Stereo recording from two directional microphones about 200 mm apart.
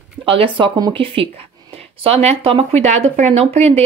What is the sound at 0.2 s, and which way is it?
A woman's voice, 25° right (ahead or behind).